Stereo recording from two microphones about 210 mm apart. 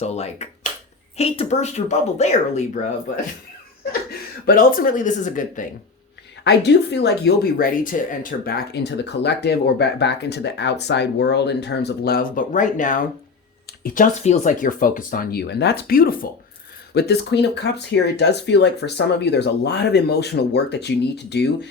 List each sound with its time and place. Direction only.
0.0 s speech: 30° left (ahead or behind)
4.4 s speech: 40° left (ahead or behind)
6.4 s speech: 55° left (ahead or behind)